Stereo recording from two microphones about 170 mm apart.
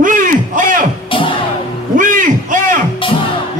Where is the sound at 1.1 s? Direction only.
30° left (ahead or behind).